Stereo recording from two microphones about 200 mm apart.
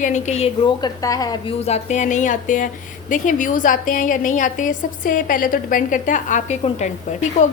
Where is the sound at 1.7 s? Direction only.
35° left (ahead or behind).